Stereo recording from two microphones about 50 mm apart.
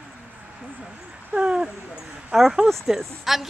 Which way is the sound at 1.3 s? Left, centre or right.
Right.